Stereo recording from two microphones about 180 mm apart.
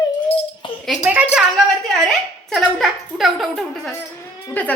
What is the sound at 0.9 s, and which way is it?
A woman's voice, 5° right (ahead or behind).